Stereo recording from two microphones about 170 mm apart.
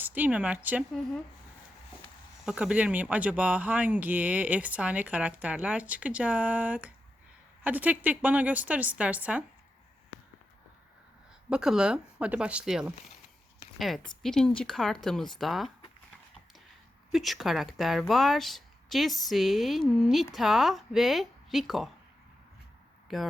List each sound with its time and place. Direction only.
0.0 s speech: 10° right (ahead or behind)
2.4 s speech: 5° right (ahead or behind)
11.4 s a woman's voice: 5° right (ahead or behind)
17.1 s a woman's voice: centre (ahead or behind)
23.1 s a woman's voice: centre (ahead or behind)